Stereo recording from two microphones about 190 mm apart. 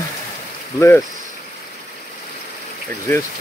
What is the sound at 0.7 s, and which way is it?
Speech, 15° left (ahead or behind).